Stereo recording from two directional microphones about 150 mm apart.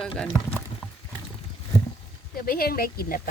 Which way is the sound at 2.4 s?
80° left.